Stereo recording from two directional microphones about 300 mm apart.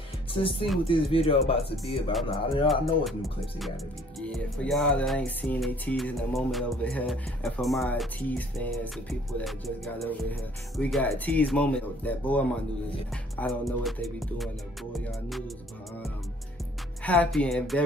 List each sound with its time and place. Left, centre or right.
0.3 s speech: centre
2.7 s music: centre
17.0 s music: centre